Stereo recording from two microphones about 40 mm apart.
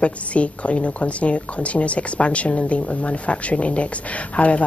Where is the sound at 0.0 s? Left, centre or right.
Left.